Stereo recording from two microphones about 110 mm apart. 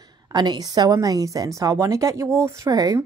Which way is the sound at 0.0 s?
40° right (ahead or behind).